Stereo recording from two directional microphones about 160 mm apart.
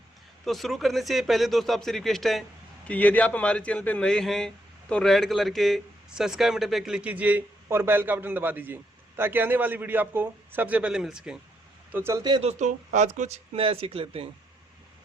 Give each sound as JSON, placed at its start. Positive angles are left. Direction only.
{"t": 0.4, "sound": "a man's voice", "side_deg": 0}
{"t": 12.4, "sound": "speech", "side_deg": -45}